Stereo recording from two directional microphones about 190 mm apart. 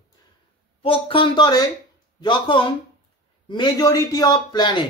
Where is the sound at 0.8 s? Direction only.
30° left (ahead or behind).